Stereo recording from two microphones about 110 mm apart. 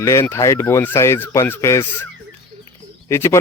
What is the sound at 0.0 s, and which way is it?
Speech, 25° left (ahead or behind).